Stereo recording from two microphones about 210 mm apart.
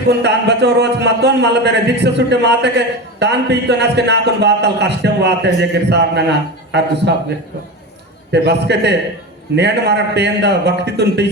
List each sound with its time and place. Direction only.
0.1 s a man's voice: 55° right (ahead or behind)
8.3 s a man's voice: 55° right (ahead or behind)